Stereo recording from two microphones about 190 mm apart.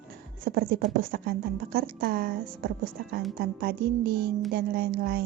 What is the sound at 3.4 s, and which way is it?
A woman's voice, 55° right (ahead or behind).